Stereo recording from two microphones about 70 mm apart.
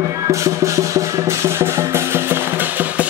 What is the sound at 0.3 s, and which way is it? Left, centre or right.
Music, right.